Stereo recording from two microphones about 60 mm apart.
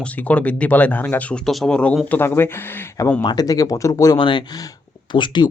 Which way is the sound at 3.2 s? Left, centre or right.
Left.